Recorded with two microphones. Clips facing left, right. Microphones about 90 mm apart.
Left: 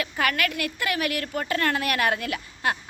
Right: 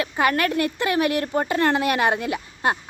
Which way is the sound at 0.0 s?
25° right (ahead or behind).